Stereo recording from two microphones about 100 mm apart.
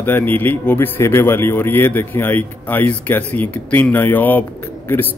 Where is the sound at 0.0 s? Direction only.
20° left (ahead or behind).